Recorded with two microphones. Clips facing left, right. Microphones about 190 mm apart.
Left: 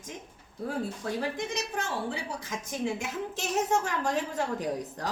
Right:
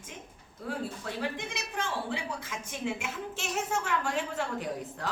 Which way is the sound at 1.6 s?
40° left (ahead or behind).